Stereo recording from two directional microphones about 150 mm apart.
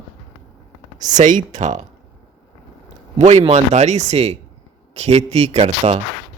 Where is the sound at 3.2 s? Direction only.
50° right (ahead or behind).